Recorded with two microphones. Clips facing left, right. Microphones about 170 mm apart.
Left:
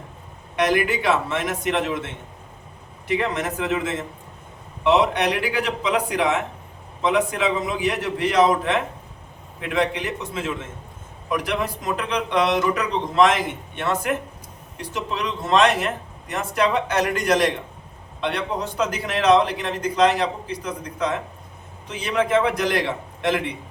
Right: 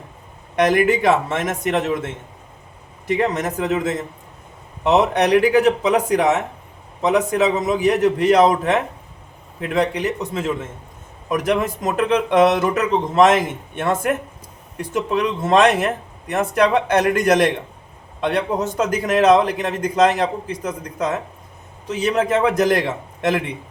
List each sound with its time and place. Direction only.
0.5 s a man's voice: 45° right (ahead or behind)
3.1 s a man's voice: 45° right (ahead or behind)